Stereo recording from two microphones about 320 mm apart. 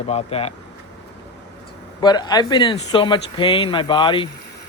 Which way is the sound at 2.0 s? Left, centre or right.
Centre.